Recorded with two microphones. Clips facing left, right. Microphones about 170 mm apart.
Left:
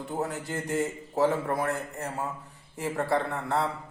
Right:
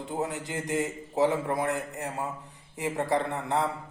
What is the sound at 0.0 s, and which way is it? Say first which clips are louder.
A man's voice: even; 20° right (ahead or behind).